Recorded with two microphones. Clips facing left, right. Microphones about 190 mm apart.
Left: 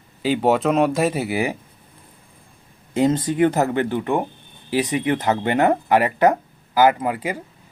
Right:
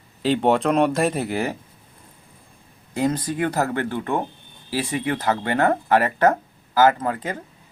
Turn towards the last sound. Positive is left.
turn(degrees=10)  # may be behind; listen again after turning